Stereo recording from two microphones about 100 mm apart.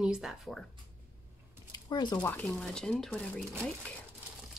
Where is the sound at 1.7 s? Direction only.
45° left (ahead or behind).